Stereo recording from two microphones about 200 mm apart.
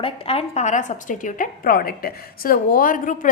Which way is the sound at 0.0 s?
30° left (ahead or behind).